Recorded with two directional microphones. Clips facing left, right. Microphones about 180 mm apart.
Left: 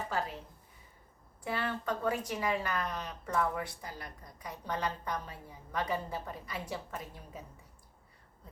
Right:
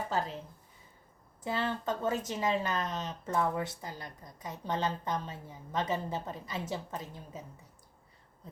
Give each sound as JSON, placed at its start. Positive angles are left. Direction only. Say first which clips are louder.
{"t": 1.5, "sound": "speech", "louder": "right 2 dB", "side_deg": -25}